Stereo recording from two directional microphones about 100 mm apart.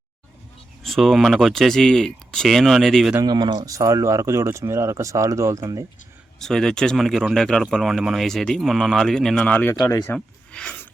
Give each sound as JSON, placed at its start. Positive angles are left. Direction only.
{"t": 0.8, "sound": "speech", "side_deg": 0}
{"t": 3.2, "sound": "speech", "side_deg": -45}
{"t": 3.7, "sound": "speech", "side_deg": -35}
{"t": 6.4, "sound": "speech", "side_deg": 5}
{"t": 9.8, "sound": "speech", "side_deg": 25}
{"t": 10.2, "sound": "speech", "side_deg": 10}